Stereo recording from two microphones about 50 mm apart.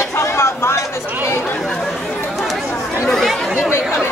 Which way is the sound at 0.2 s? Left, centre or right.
Left.